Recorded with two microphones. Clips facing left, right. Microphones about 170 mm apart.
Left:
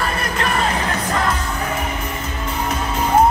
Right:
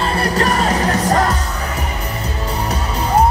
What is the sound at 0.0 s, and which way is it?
Music, 35° right (ahead or behind).